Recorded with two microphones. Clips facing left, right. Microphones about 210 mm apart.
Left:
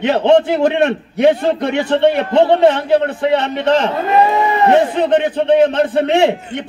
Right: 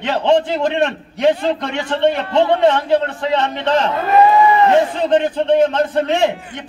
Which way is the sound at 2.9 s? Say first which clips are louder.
Left 3 dB; 60° left (ahead or behind).